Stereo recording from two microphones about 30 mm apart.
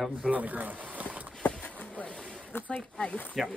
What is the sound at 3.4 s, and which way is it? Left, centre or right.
Speech, centre.